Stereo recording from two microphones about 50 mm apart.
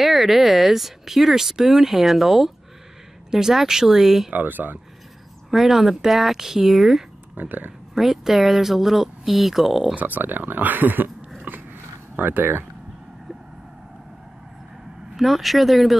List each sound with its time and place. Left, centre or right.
0.0 s speech: centre
4.3 s speech: right
5.5 s speech: centre
7.3 s speech: right
7.9 s speech: centre
9.9 s speech: right
11.5 s biting: right
12.2 s speech: right
15.1 s speech: centre